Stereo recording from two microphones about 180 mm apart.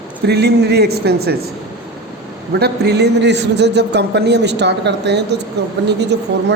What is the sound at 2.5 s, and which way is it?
A man's voice, 65° right (ahead or behind).